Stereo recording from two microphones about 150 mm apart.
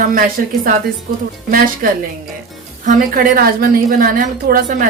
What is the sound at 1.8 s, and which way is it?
Speech, 80° right.